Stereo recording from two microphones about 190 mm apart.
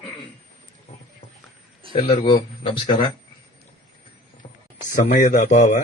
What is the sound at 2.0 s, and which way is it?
Speech, 30° left (ahead or behind).